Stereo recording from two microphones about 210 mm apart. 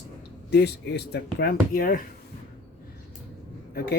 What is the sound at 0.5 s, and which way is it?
Speech, 50° left (ahead or behind).